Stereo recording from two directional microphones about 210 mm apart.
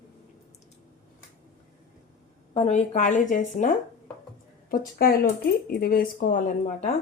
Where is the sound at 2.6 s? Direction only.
30° left (ahead or behind).